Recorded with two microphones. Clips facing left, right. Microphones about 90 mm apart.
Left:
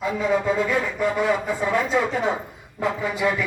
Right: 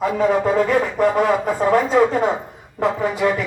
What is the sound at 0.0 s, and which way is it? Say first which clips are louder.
Speech: right 5 dB; 45° right (ahead or behind).